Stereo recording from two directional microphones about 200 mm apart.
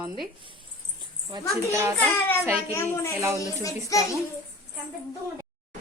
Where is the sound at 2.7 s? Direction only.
15° left (ahead or behind).